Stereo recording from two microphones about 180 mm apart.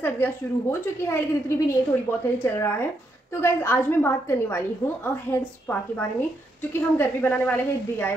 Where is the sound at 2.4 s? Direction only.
15° left (ahead or behind).